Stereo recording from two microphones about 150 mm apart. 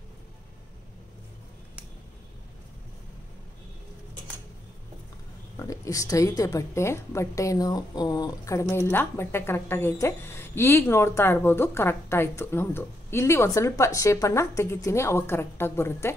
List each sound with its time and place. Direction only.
5.6 s a woman's voice: 20° left (ahead or behind)